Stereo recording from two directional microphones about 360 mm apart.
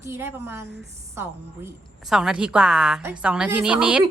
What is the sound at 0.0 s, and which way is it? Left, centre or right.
A woman's voice, centre.